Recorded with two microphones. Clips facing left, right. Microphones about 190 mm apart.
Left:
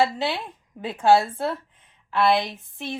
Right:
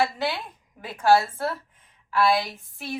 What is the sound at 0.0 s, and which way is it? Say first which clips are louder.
Speech: left 2 dB; 25° left (ahead or behind).